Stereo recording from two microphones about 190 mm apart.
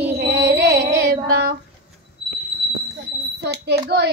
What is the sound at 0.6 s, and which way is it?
Child singing, 60° right (ahead or behind).